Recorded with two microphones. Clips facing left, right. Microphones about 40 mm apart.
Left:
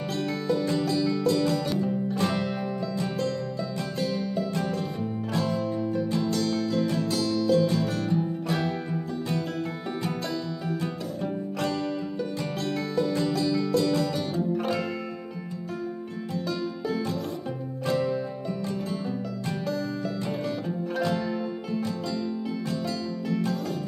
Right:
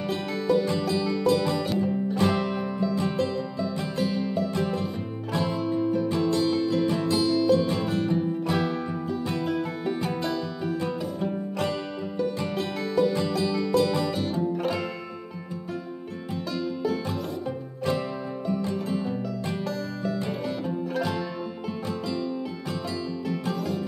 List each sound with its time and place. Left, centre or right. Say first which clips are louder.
0.1 s music: right 3 dB; centre
1.7 s music: right 1 dB; centre
4.0 s music: right 2 dB; centre
10.0 s music: right 2 dB; centre
12.5 s music: right 1 dB; centre
14.6 s music: even; centre
17.8 s music: left 2 dB; centre
20.6 s music: right 1 dB; centre
23.2 s music: left 4 dB; centre